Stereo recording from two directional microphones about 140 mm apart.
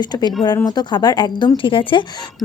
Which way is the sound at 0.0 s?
30° left (ahead or behind).